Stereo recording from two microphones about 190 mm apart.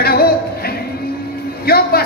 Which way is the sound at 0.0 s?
55° left (ahead or behind).